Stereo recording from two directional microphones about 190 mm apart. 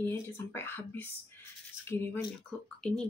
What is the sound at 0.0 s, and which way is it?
Speech, 15° left (ahead or behind).